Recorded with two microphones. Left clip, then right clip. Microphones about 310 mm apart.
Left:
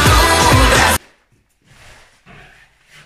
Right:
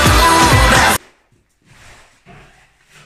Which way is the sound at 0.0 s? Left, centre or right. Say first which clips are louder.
Right 1 dB; centre.